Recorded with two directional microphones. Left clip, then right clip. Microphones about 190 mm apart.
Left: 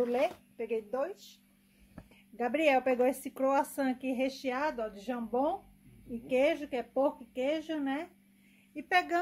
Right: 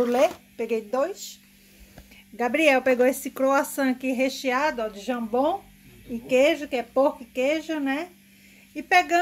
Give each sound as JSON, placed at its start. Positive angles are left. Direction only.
{"t": 0.0, "sound": "speech", "side_deg": -15}
{"t": 2.3, "sound": "speech", "side_deg": 0}